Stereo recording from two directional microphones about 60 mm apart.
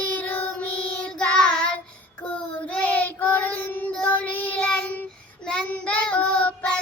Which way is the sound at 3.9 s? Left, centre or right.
Centre.